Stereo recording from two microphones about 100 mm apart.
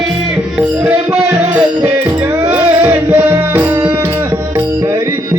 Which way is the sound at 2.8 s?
20° right (ahead or behind).